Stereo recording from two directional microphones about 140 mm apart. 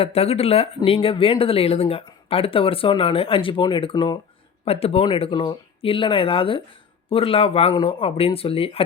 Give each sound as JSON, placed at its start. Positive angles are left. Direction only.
{"t": 0.0, "sound": "speech", "side_deg": 45}
{"t": 4.6, "sound": "speech", "side_deg": 45}